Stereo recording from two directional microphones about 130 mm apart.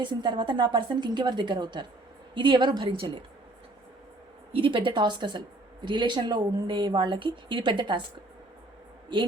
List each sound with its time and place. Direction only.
0.0 s speech: 35° right (ahead or behind)
4.5 s speech: 40° right (ahead or behind)